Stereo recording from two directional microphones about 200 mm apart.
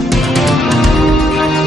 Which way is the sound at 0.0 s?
Centre (ahead or behind).